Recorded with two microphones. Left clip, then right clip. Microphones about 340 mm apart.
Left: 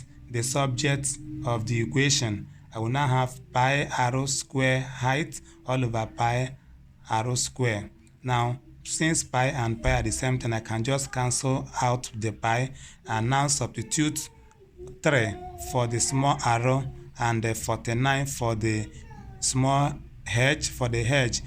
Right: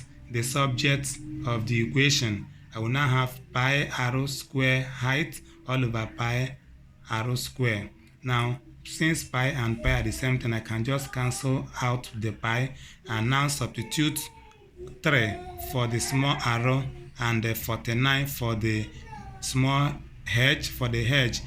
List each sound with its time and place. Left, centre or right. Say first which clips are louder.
0.3 s a man's voice: even; left